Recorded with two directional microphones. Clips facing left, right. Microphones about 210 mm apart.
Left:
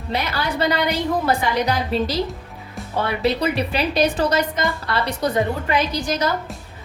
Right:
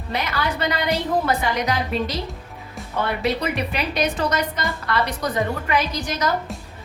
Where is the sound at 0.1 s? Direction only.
30° left (ahead or behind).